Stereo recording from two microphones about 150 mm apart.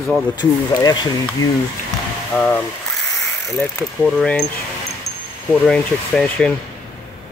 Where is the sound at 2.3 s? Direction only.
10° left (ahead or behind).